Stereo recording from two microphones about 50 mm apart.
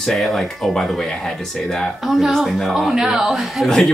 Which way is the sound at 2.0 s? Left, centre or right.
Centre.